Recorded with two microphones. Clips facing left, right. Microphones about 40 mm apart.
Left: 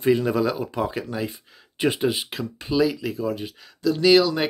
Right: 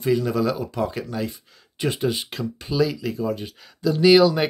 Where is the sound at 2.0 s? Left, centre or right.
Centre.